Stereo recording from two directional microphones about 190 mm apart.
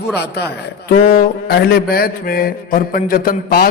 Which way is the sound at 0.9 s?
55° left (ahead or behind).